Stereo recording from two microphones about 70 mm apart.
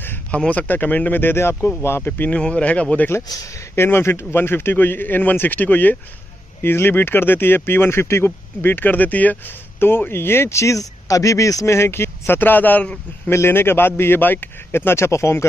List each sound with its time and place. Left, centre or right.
0.3 s speech: centre
2.3 s speech: centre
3.7 s speech: left